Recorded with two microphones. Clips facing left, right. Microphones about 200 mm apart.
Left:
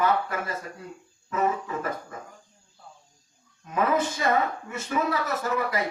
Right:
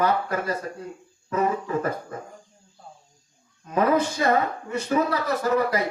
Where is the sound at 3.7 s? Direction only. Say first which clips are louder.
Right 4 dB; 40° right (ahead or behind).